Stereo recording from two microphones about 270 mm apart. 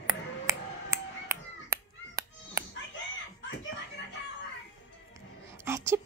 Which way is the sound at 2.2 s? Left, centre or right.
Centre.